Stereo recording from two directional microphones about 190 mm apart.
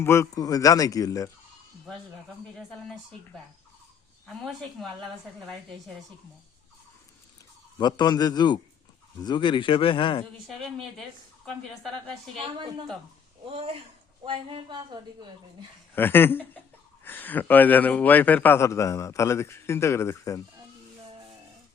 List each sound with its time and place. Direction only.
0.0 s speech: 15° left (ahead or behind)
2.6 s speech: centre (ahead or behind)
7.8 s speech: 20° left (ahead or behind)
13.4 s a woman's voice: 30° right (ahead or behind)
16.0 s a man's voice: 10° left (ahead or behind)
21.0 s music: 30° right (ahead or behind)